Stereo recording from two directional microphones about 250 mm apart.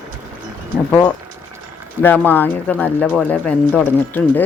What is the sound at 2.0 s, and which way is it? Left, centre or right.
Speech, centre.